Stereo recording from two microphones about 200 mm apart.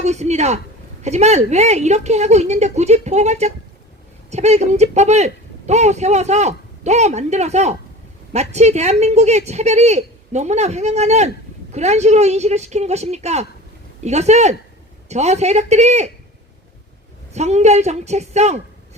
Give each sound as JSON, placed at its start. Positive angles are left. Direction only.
{"t": 0.0, "sound": "speech", "side_deg": -35}
{"t": 17.3, "sound": "speech", "side_deg": -35}